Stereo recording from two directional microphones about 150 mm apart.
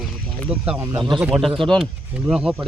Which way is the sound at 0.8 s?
25° right (ahead or behind).